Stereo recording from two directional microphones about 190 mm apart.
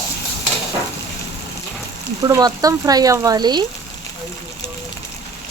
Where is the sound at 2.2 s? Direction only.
20° right (ahead or behind).